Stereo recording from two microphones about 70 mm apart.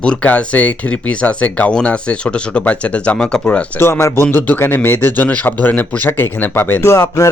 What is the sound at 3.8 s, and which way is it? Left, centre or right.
Speech, left.